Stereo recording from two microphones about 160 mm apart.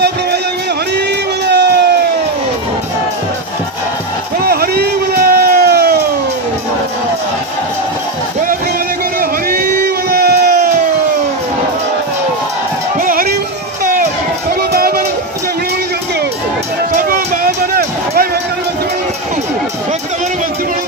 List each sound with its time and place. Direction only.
1.5 s a sound: 90° right
4.5 s crowd: 75° right (ahead or behind)
9.2 s crowd: 70° right (ahead or behind)
13.0 s music: 65° right (ahead or behind)
14.6 s a sound: 70° right (ahead or behind)
16.9 s run: 60° right (ahead or behind)